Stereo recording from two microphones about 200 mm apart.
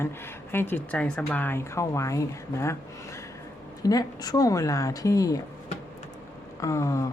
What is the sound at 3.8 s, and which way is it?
A woman's voice, 20° left (ahead or behind).